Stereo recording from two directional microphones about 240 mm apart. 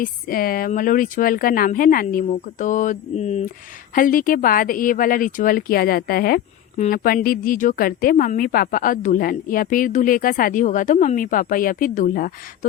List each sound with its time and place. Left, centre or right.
0.0 s a woman's voice: left